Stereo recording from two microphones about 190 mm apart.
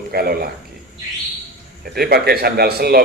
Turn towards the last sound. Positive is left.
turn(degrees=-55)  # may be behind; listen again after turning